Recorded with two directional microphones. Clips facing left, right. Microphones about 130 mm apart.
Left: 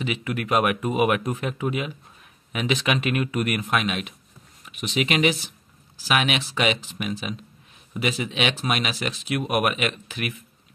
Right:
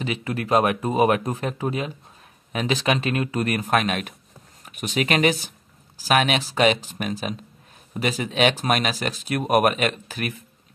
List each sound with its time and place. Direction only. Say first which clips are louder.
0.0 s speech: even; 35° right (ahead or behind)